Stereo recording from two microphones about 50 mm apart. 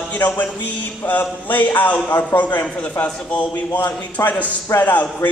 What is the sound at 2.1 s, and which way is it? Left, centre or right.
Speech, left.